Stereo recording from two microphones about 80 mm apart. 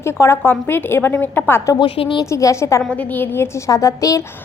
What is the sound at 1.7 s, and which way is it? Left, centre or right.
Speech, left.